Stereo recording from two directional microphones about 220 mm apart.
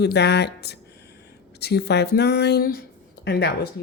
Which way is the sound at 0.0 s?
50° left (ahead or behind).